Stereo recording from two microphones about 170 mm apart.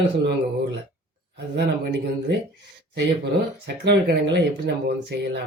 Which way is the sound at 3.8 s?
90° right.